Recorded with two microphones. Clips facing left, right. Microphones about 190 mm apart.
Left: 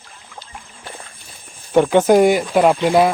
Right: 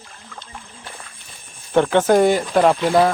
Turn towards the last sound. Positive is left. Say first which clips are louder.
# left 1 dB
turn(degrees=10)  # may be behind; listen again after turning